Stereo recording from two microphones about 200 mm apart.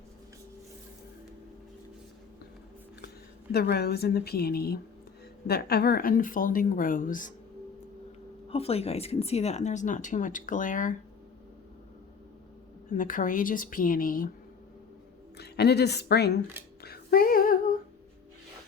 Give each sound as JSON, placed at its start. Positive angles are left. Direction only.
{"t": 3.5, "sound": "a woman's voice", "side_deg": 50}
{"t": 8.4, "sound": "speech", "side_deg": 30}
{"t": 12.9, "sound": "a woman's voice", "side_deg": 40}
{"t": 15.4, "sound": "speech", "side_deg": 55}
{"t": 16.8, "sound": "female singing", "side_deg": 50}